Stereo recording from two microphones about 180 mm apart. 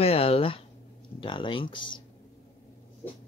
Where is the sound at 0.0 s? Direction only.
35° left (ahead or behind).